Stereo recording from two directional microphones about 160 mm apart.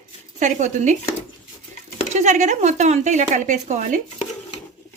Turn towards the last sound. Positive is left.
turn(degrees=-50)  # may be behind; listen again after turning